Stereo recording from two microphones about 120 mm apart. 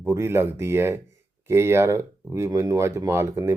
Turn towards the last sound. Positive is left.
turn(degrees=-20)  # may be behind; listen again after turning